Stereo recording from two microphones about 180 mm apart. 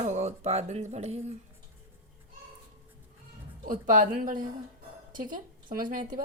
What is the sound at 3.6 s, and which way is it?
A woman's voice, 45° right (ahead or behind).